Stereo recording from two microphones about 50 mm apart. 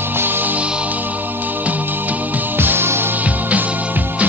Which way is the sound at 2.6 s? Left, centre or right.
Right.